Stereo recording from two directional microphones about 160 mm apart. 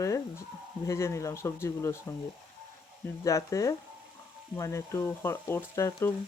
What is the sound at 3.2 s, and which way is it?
Speech, 20° left (ahead or behind).